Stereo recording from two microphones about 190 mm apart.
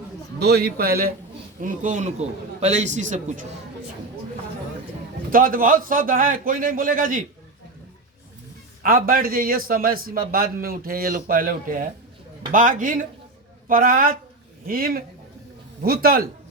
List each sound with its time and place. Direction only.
0.3 s a man's voice: 60° right (ahead or behind); by 3.4 s 40° right (ahead or behind)
5.3 s a man's voice: 45° right (ahead or behind)
8.8 s a man's voice: 45° right (ahead or behind)